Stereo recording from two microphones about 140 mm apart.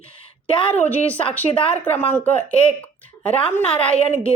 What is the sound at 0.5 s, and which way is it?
Speech, 40° left (ahead or behind).